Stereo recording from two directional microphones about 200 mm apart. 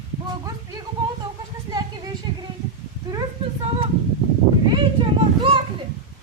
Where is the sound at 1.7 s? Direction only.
15° right (ahead or behind).